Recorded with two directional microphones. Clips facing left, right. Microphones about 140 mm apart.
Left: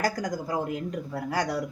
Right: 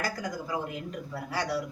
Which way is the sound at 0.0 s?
45° left (ahead or behind).